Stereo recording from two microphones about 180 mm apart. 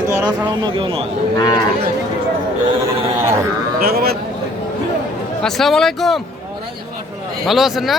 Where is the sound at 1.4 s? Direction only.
20° left (ahead or behind).